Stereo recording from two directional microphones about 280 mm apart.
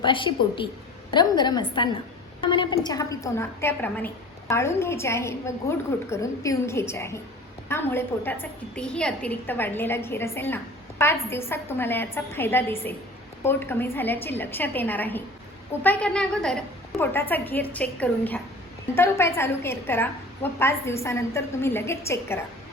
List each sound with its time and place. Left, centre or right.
0.0 s a woman's voice: centre